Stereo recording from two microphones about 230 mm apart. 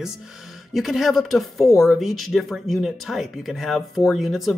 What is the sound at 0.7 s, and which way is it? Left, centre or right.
Speech, centre.